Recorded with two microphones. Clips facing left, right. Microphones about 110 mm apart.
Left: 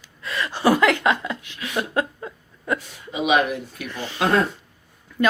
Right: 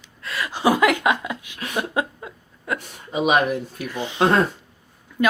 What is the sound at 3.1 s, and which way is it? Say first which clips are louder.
Speech: right 1 dB; 45° right (ahead or behind).